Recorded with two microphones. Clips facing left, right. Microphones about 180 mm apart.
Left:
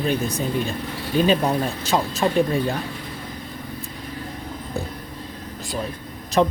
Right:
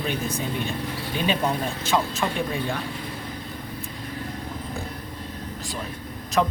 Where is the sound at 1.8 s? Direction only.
35° left (ahead or behind).